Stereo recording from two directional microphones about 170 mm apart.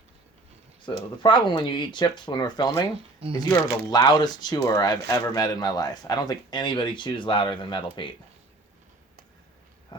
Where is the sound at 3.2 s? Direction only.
35° right (ahead or behind).